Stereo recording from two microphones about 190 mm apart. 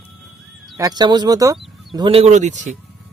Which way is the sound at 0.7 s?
20° right (ahead or behind).